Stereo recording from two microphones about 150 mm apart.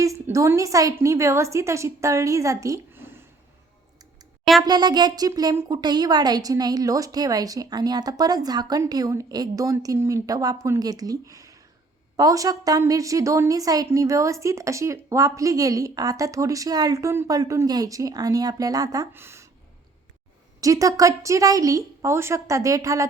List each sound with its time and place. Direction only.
0.0 s a woman's voice: 20° right (ahead or behind)
4.6 s a woman's voice: 30° right (ahead or behind)
20.6 s a woman's voice: 20° right (ahead or behind)